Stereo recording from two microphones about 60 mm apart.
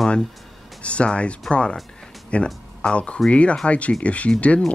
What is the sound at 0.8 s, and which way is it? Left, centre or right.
Speech, centre.